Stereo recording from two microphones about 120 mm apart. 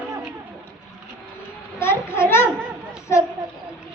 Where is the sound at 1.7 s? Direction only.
20° left (ahead or behind).